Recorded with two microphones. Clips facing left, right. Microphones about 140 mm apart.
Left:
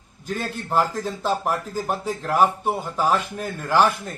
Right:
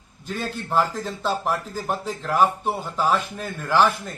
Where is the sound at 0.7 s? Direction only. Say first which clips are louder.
Left 1 dB; 10° left (ahead or behind).